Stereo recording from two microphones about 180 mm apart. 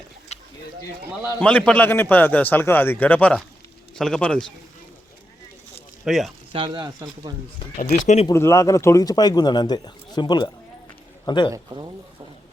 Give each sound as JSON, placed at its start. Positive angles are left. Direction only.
{"t": 1.4, "sound": "a man's voice", "side_deg": 5}
{"t": 6.1, "sound": "a man's voice", "side_deg": 0}
{"t": 6.5, "sound": "speech", "side_deg": -30}
{"t": 7.8, "sound": "speech", "side_deg": 40}
{"t": 8.3, "sound": "speech", "side_deg": 15}
{"t": 11.5, "sound": "speech", "side_deg": -25}